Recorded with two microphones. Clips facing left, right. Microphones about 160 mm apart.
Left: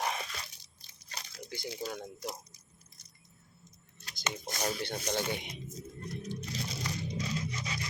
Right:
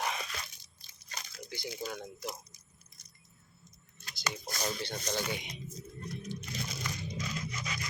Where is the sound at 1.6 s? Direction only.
35° left (ahead or behind).